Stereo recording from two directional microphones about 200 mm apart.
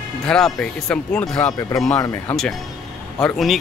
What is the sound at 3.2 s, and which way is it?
Speech, centre (ahead or behind).